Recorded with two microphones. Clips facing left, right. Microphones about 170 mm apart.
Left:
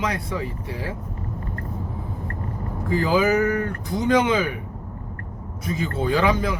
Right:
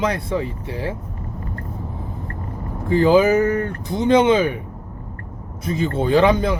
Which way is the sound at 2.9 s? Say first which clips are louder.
Right 6 dB; 25° right (ahead or behind).